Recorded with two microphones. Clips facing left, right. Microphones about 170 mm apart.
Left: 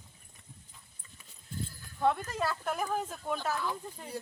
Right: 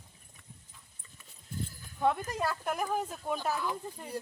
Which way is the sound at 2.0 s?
10° right (ahead or behind).